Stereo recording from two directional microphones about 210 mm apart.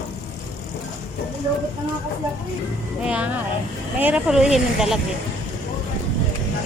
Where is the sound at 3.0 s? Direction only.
5° right (ahead or behind).